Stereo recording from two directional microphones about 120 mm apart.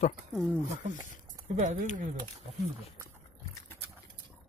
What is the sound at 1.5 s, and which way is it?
Speech, 80° right.